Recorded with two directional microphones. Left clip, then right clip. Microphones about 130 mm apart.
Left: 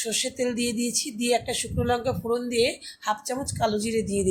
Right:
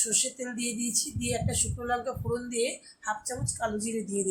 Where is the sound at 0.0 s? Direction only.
55° left (ahead or behind).